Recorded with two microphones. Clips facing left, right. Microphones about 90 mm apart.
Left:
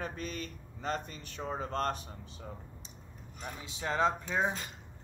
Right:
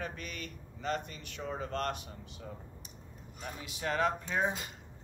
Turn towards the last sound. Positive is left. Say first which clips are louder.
# left 1 dB
turn(degrees=20)  # may be behind; listen again after turning